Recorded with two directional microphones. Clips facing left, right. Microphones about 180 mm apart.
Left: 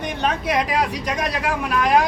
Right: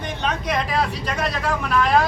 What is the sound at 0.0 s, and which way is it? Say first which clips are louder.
Speech: left 2 dB; 10° left (ahead or behind).